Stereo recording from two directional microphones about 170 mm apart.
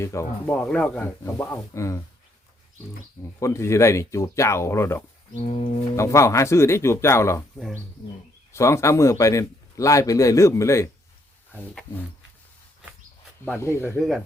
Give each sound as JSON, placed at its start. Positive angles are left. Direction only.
{"t": 0.0, "sound": "a man's voice", "side_deg": 15}
{"t": 3.4, "sound": "a man's voice", "side_deg": 15}
{"t": 5.3, "sound": "a sound", "side_deg": 35}
{"t": 6.0, "sound": "a man's voice", "side_deg": 15}
{"t": 8.5, "sound": "a man's voice", "side_deg": 15}
{"t": 13.6, "sound": "a man's voice", "side_deg": 15}